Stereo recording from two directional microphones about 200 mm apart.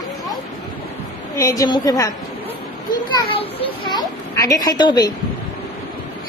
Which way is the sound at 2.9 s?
30° left (ahead or behind).